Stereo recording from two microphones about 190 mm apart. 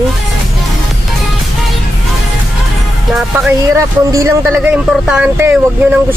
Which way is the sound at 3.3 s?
15° right (ahead or behind).